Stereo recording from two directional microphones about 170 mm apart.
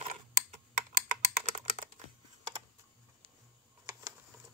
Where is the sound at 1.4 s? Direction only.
40° right (ahead or behind).